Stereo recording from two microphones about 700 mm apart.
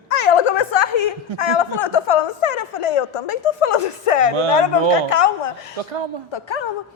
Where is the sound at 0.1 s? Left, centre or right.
Left.